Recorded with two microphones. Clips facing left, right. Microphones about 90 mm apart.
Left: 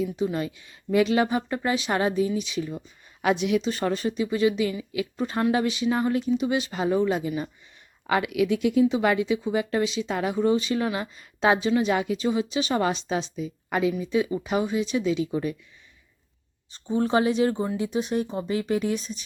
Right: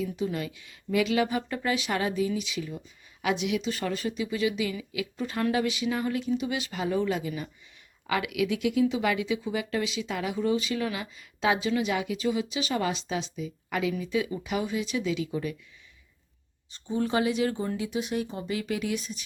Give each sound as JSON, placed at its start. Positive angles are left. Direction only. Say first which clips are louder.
{"t": 0.0, "sound": "speech", "louder": "left 4 dB", "side_deg": 25}
{"t": 16.7, "sound": "speech", "louder": "left 4 dB", "side_deg": 35}